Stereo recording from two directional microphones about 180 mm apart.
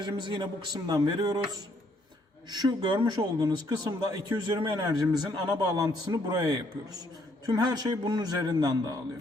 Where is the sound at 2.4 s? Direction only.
20° right (ahead or behind).